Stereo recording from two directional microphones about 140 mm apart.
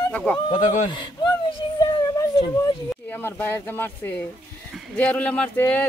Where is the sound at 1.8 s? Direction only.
30° left (ahead or behind).